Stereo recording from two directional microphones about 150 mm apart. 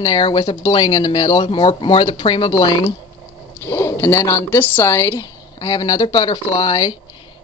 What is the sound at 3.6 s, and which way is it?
Speech, 20° left (ahead or behind).